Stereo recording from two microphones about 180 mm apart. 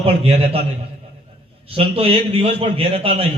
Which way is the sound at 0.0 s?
35° right (ahead or behind).